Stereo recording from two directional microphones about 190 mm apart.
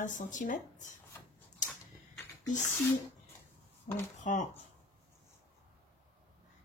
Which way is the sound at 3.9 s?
40° left (ahead or behind).